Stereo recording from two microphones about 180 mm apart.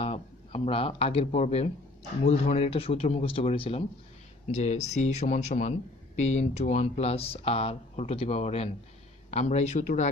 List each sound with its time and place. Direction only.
0.0 s speech: 30° left (ahead or behind)